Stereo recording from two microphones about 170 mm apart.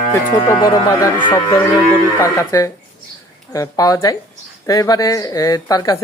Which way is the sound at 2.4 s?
20° left (ahead or behind).